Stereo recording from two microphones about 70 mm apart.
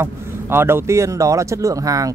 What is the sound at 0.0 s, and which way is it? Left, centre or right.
Speech, right.